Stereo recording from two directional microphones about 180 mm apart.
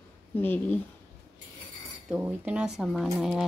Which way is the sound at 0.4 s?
10° left (ahead or behind).